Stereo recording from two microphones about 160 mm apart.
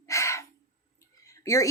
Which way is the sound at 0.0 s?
20° left (ahead or behind).